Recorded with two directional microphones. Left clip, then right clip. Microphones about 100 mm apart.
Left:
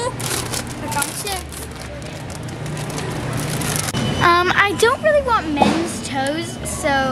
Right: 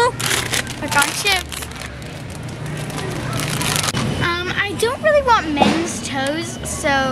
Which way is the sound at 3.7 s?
15° right (ahead or behind).